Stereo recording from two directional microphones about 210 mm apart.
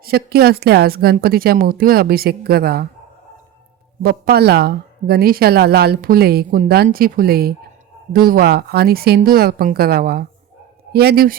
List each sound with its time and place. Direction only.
0.0 s a woman's voice: 45° right (ahead or behind)
4.0 s a woman's voice: 45° right (ahead or behind)